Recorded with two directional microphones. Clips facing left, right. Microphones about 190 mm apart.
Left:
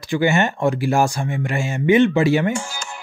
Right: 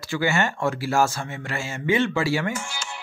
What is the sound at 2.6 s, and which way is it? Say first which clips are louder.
Music: left 3 dB; 45° left (ahead or behind).